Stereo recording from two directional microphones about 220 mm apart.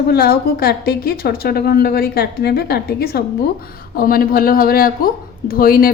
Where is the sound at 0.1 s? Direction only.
45° left (ahead or behind).